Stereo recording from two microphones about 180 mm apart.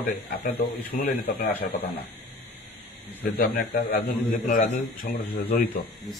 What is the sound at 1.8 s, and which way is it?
Speech, 60° left (ahead or behind).